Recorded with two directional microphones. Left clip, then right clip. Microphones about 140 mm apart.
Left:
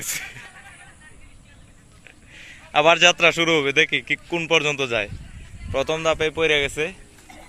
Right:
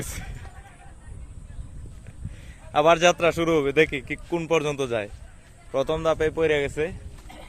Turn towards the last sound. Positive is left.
turn(degrees=-20)  # may be behind; listen again after turning